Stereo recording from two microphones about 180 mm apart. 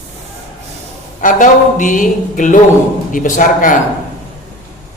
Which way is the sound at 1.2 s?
45° left (ahead or behind).